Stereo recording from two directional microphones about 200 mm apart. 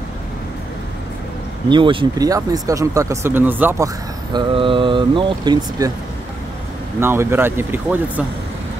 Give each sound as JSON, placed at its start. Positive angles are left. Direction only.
{"t": 1.7, "sound": "speech", "side_deg": -25}
{"t": 7.0, "sound": "speech", "side_deg": -10}